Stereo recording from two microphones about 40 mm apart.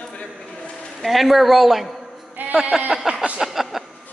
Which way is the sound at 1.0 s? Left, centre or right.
Centre.